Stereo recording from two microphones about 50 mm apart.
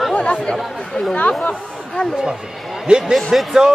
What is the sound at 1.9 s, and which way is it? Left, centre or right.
Speech, centre.